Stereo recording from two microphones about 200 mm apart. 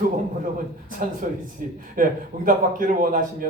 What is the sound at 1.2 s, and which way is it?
A man's voice, 40° right (ahead or behind).